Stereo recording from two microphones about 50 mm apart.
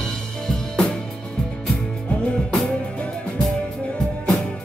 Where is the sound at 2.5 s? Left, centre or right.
Centre.